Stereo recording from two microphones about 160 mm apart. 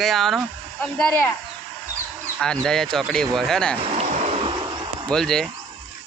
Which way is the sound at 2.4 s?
5° left (ahead or behind).